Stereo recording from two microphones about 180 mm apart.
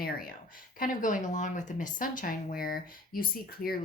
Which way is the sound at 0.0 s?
55° left (ahead or behind).